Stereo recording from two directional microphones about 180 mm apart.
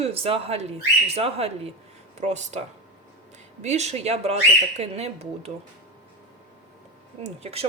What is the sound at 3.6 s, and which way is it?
Speech, 40° right (ahead or behind).